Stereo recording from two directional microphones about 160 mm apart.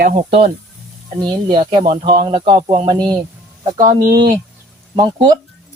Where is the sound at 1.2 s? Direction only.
30° right (ahead or behind).